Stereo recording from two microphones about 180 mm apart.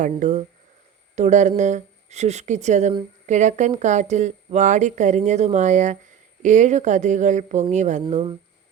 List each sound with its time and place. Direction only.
0.0 s speech: 45° right (ahead or behind)
8.1 s speech: 30° right (ahead or behind)